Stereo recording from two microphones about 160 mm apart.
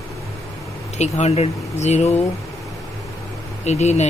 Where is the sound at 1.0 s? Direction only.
45° left (ahead or behind).